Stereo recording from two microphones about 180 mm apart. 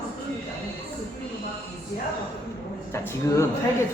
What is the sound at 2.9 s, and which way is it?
Speech, 15° left (ahead or behind).